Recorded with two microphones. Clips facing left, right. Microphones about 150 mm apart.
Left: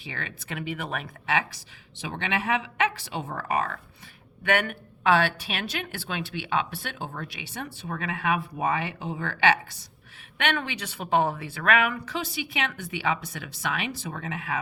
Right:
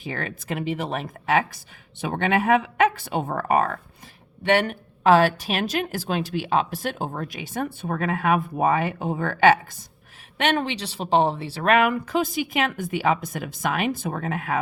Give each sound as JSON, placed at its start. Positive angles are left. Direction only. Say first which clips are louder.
{"t": 0.0, "sound": "a woman's voice", "louder": "right 7 dB", "side_deg": -45}
{"t": 4.4, "sound": "a woman's voice", "louder": "right 5 dB", "side_deg": -30}
{"t": 10.3, "sound": "a woman's voice", "louder": "right 5 dB", "side_deg": -35}